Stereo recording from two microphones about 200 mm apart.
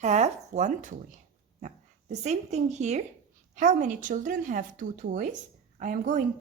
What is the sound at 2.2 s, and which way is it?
Speech, 35° right (ahead or behind).